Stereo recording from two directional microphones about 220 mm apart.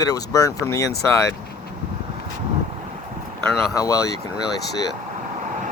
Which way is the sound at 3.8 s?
15° left (ahead or behind).